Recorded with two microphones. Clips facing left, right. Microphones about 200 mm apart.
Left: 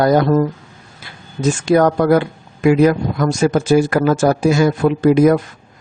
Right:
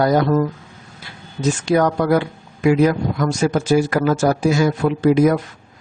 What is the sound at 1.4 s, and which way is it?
Speech, 50° left (ahead or behind).